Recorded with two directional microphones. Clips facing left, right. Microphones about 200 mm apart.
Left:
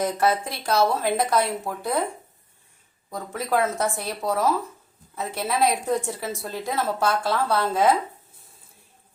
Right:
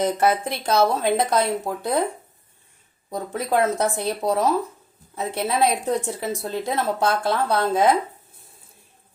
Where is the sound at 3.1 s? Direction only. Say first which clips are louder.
Right 2 dB; 20° right (ahead or behind).